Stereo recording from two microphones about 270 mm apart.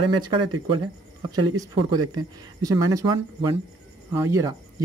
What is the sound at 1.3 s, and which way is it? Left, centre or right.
Speech, centre.